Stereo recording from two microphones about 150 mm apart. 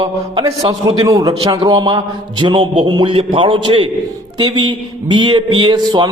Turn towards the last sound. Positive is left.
turn(degrees=-30)  # may be behind; listen again after turning